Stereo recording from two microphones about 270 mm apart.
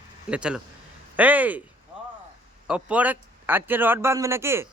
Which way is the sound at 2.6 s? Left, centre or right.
Centre.